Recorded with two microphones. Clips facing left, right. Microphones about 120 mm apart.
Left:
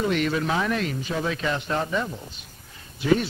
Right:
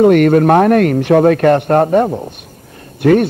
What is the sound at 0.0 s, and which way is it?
A man's voice, 55° right (ahead or behind).